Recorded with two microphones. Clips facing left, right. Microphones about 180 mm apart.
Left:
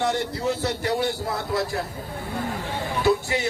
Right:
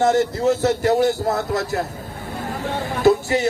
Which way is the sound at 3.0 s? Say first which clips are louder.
Right 6 dB; 45° right (ahead or behind).